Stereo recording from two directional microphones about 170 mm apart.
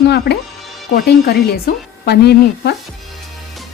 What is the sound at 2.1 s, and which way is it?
Speech, 75° left (ahead or behind).